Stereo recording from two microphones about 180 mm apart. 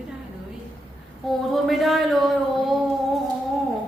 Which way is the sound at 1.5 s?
Centre (ahead or behind).